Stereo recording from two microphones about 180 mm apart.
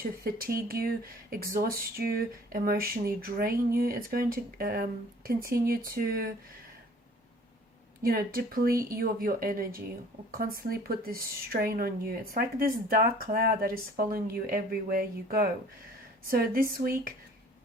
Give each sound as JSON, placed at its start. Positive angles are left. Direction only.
{"t": 0.0, "sound": "speech", "side_deg": -55}
{"t": 8.0, "sound": "speech", "side_deg": -55}